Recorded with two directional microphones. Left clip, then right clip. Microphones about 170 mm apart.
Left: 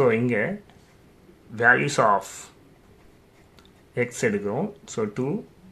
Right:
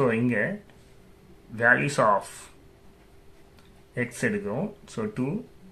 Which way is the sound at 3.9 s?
30° left (ahead or behind).